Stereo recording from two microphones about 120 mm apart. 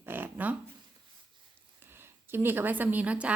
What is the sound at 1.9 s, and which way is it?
A woman's voice, 20° right (ahead or behind).